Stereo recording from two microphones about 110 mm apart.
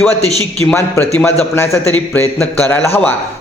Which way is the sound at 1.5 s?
20° left (ahead or behind).